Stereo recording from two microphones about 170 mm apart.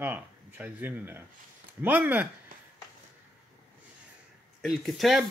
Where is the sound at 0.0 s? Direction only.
10° right (ahead or behind).